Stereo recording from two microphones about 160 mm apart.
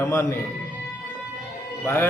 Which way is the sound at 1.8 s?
15° left (ahead or behind).